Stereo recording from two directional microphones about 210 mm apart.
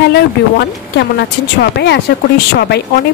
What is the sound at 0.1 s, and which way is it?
Speech, 50° left (ahead or behind).